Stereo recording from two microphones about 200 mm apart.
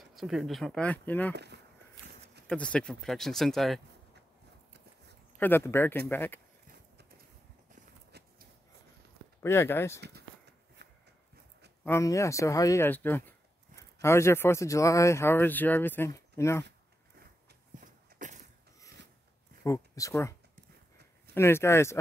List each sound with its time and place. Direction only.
0.0 s speech: centre (ahead or behind)
1.3 s speech: 55° right (ahead or behind)
2.4 s speech: 5° left (ahead or behind)
5.4 s speech: 10° left (ahead or behind)
8.1 s a sound: 55° right (ahead or behind)
9.4 s speech: 15° left (ahead or behind)
11.8 s speech: 15° left (ahead or behind)
17.7 s walk: 40° right (ahead or behind)
19.6 s speech: 15° left (ahead or behind)
21.4 s speech: 15° left (ahead or behind)